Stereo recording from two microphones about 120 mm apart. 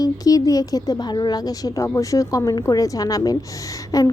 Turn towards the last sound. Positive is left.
turn(degrees=30)  # may be behind; listen again after turning